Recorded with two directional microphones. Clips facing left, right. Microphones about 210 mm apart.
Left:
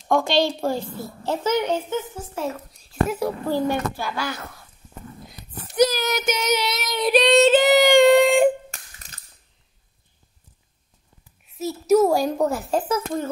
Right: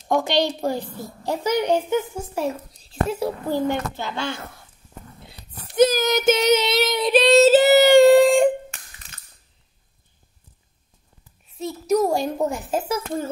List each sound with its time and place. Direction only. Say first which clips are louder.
0.1 s a woman's voice: left 1 dB; 20° right (ahead or behind)
2.9 s speech: left 1 dB; 30° right (ahead or behind)
3.4 s a woman's voice: even; 20° right (ahead or behind)
5.8 s a woman's voice: right 3 dB; 20° right (ahead or behind)
7.1 s female singing: right 1 dB; centre (ahead or behind)
8.6 s a sound: right 1 dB; 35° left (ahead or behind)
11.4 s a woman's voice: left 2 dB; 5° left (ahead or behind)
12.6 s a child's voice: left 2 dB; 10° right (ahead or behind)